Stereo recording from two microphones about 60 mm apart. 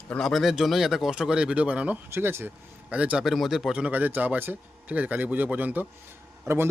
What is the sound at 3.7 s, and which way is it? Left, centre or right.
Speech, right.